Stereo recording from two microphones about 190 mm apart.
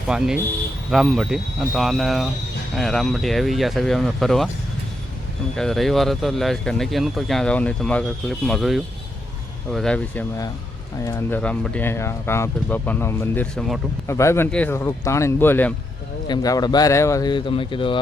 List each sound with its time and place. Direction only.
0.1 s speech: 5° right (ahead or behind)
5.5 s speech: centre (ahead or behind)
14.1 s speech: 15° left (ahead or behind)
16.2 s speech: 20° left (ahead or behind)